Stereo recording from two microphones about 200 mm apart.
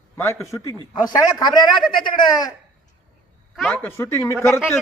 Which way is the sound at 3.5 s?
5° left (ahead or behind).